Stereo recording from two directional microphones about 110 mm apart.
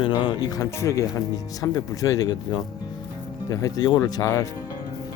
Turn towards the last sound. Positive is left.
turn(degrees=35)  # may be behind; listen again after turning